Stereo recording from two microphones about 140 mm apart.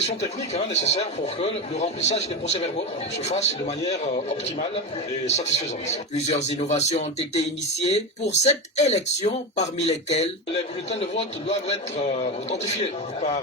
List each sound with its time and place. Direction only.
0.0 s a man's voice: 50° left (ahead or behind)